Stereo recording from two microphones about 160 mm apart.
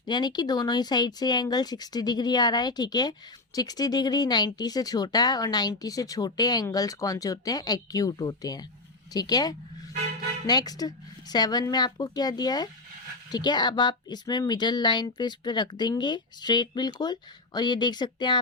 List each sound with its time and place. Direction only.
0.0 s speech: 25° left (ahead or behind)